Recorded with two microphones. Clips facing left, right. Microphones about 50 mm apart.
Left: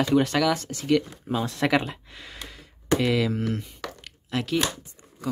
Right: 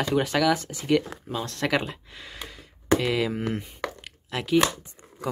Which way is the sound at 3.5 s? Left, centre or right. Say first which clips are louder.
Right 1 dB; right.